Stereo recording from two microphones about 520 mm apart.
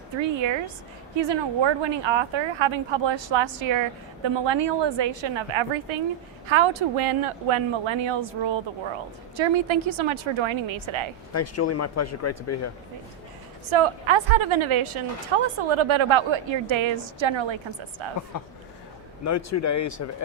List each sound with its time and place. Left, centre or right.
0.2 s a woman's voice: right
11.3 s speech: left
13.7 s a woman's voice: right
19.2 s speech: left